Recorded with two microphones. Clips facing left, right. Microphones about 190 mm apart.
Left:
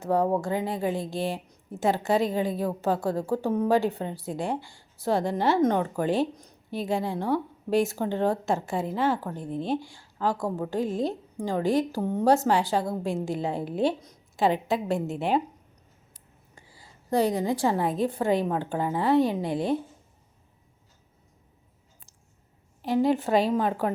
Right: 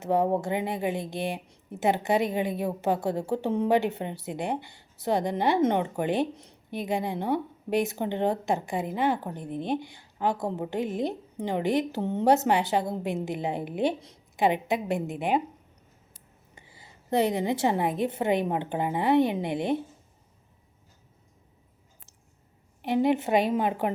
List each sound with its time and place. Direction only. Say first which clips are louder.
0.0 s a woman's voice: even; 20° right (ahead or behind)
22.9 s a woman's voice: left 1 dB; 20° right (ahead or behind)